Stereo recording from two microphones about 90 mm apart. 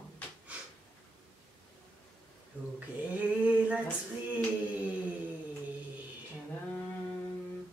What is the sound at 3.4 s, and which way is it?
Speech, 15° right (ahead or behind).